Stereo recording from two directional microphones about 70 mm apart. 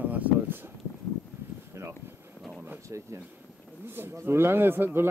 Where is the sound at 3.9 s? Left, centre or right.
Right.